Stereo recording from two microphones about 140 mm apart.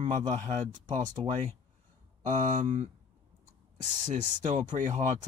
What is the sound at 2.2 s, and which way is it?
Speech, 65° right (ahead or behind).